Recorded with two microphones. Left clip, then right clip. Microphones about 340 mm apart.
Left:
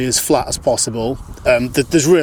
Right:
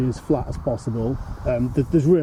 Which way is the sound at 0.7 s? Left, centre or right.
Left.